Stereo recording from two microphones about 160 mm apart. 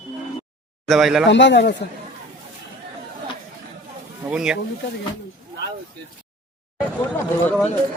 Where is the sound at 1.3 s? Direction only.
90° left.